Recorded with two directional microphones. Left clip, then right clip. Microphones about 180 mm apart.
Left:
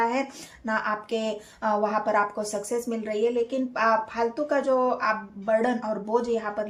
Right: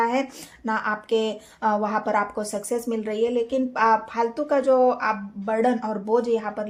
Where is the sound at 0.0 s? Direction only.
45° right (ahead or behind).